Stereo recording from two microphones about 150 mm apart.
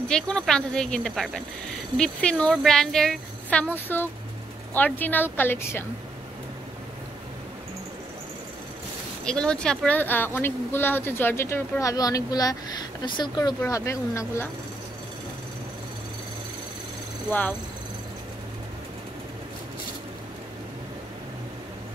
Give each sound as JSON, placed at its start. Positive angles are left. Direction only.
{"t": 0.1, "sound": "speech", "side_deg": 5}
{"t": 9.2, "sound": "speech", "side_deg": 5}
{"t": 17.3, "sound": "speech", "side_deg": 10}